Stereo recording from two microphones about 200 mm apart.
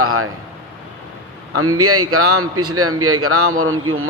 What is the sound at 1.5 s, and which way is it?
A man's voice, 90° right.